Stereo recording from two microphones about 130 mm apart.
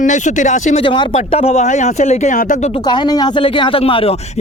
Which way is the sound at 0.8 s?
40° left (ahead or behind).